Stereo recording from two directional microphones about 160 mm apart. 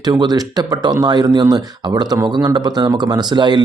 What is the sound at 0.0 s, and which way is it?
Speech, 25° right (ahead or behind).